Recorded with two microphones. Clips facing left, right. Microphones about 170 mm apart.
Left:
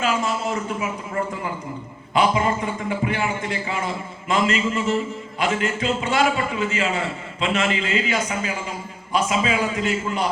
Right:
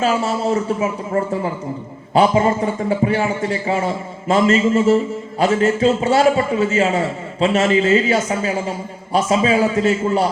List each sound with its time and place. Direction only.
0.0 s a man's voice: 35° right (ahead or behind)